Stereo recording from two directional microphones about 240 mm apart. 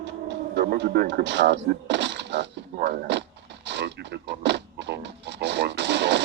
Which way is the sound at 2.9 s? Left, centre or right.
Right.